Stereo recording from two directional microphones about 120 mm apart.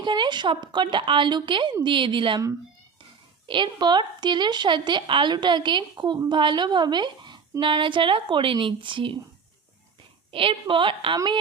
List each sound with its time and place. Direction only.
0.0 s a woman's voice: 40° right (ahead or behind)
3.4 s a woman's voice: 40° right (ahead or behind)
10.3 s a woman's voice: 50° right (ahead or behind)